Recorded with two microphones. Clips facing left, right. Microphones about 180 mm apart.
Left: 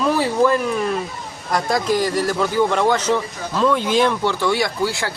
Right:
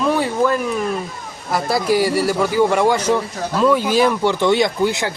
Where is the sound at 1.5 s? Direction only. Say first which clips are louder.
Right 2 dB; 5° right (ahead or behind).